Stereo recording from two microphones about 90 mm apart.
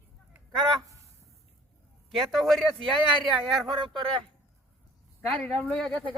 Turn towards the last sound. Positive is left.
turn(degrees=10)  # may be behind; listen again after turning